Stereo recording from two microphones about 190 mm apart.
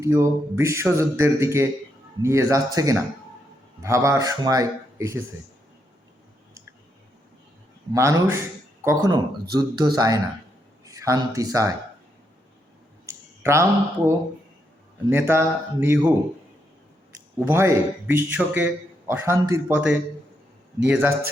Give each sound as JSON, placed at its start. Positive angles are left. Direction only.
{"t": 0.0, "sound": "a man's voice", "side_deg": -15}
{"t": 7.9, "sound": "speech", "side_deg": -15}
{"t": 13.1, "sound": "a man's voice", "side_deg": -15}
{"t": 17.4, "sound": "a man's voice", "side_deg": -15}